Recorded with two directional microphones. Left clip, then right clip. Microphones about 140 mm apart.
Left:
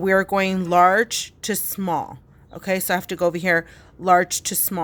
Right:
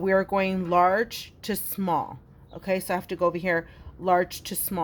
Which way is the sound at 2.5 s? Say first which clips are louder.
Left 5 dB; 40° left (ahead or behind).